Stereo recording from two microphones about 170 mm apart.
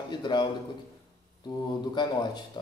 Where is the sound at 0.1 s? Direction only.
25° left (ahead or behind).